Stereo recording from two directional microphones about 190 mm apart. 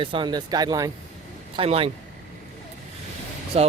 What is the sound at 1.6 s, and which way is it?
Speech, 30° right (ahead or behind).